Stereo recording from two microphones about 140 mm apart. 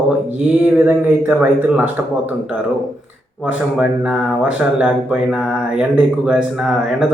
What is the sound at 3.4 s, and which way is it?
Speech, 10° right (ahead or behind).